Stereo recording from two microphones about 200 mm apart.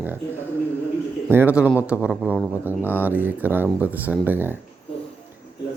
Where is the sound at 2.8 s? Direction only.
10° left (ahead or behind).